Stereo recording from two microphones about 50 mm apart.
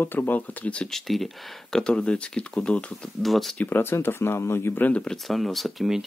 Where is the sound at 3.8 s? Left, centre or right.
Left.